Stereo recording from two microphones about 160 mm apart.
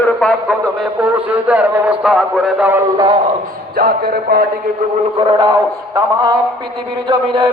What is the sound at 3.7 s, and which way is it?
Music, 70° right (ahead or behind).